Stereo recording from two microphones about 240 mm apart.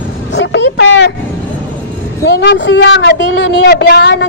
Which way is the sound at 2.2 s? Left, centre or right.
Left.